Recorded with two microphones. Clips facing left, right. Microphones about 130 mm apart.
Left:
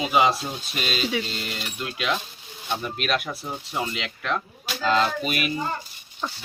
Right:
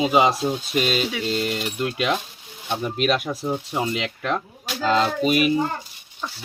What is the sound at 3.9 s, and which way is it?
Speech, 45° right (ahead or behind).